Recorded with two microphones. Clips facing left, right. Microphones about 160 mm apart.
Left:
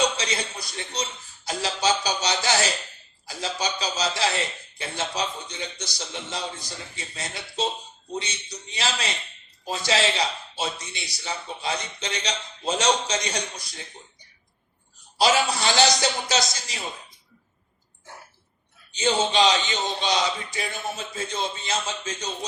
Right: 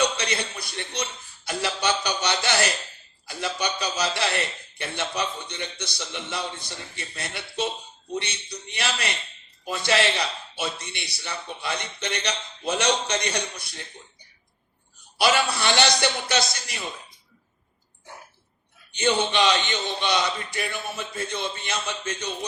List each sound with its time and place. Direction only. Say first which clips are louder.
0.0 s a man's voice: even; 60° right (ahead or behind)
1.5 s a sound: left 1 dB; 60° right (ahead or behind)
3.2 s a man's voice: right 1 dB; 60° right (ahead or behind)
15.2 s a man's voice: left 1 dB; 60° right (ahead or behind)
18.9 s a man's voice: even; 60° right (ahead or behind)